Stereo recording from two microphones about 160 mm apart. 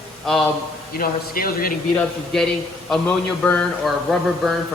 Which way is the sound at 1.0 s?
65° left (ahead or behind).